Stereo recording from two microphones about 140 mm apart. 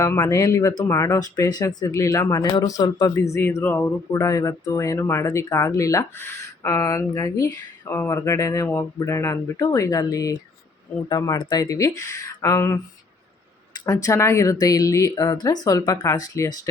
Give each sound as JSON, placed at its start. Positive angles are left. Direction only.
{"t": 0.0, "sound": "speech", "side_deg": 20}
{"t": 11.3, "sound": "speech", "side_deg": 30}
{"t": 13.8, "sound": "speech", "side_deg": 25}